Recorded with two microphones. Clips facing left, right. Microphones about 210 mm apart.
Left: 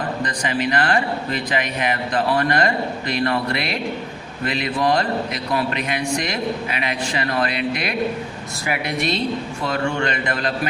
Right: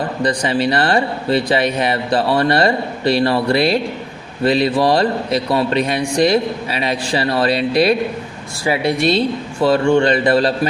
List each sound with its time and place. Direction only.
0.2 s speech: 35° right (ahead or behind)